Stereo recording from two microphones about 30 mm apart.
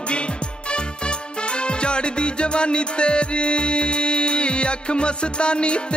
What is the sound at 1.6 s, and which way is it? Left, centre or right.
Music, left.